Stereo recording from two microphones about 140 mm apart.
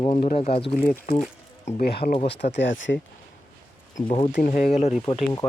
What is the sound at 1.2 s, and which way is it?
Speech, 80° left.